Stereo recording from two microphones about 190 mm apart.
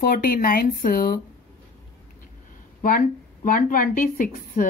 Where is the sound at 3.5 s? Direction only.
45° left (ahead or behind).